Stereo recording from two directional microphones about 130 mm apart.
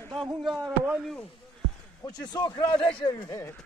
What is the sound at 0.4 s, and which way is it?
Speech, centre (ahead or behind).